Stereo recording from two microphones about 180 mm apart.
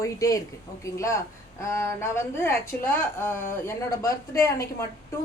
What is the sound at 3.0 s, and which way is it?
A woman's voice, 15° left (ahead or behind).